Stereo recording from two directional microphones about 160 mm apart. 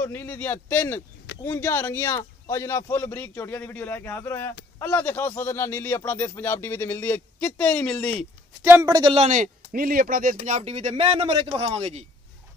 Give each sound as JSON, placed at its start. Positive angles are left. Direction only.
{"t": 0.0, "sound": "speech", "side_deg": 15}
{"t": 8.6, "sound": "speech", "side_deg": -20}
{"t": 9.1, "sound": "speech", "side_deg": -45}
{"t": 10.4, "sound": "speech", "side_deg": -45}